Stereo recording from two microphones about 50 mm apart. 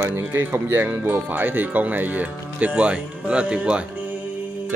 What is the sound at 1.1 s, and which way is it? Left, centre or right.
Speech, right.